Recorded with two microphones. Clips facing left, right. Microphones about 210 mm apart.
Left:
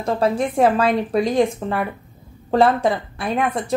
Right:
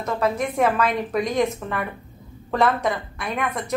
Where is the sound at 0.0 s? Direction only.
30° left (ahead or behind).